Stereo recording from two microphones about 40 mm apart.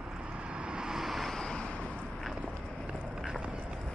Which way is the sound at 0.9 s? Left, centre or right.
Centre.